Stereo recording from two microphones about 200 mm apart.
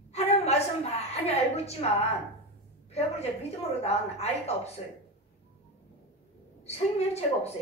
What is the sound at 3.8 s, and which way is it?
Speech, 30° left (ahead or behind).